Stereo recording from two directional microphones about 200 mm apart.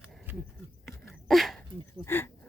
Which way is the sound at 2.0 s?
10° left (ahead or behind).